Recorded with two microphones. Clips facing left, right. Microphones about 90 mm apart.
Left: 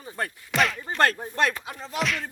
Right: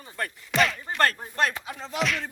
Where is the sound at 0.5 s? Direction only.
Centre (ahead or behind).